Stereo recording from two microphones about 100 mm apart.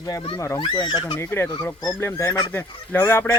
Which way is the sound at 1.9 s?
30° left (ahead or behind).